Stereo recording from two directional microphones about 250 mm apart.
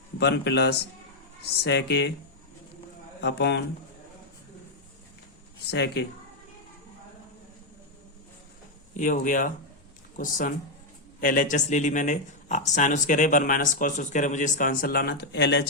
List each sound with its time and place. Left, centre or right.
0.2 s speech: left
3.2 s a man's voice: left
5.7 s speech: left
9.0 s speech: left